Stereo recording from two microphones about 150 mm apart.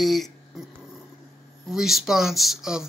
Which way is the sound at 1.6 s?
Centre (ahead or behind).